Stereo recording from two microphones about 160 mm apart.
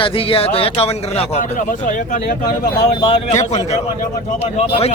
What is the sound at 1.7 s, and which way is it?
Speech, 55° left (ahead or behind).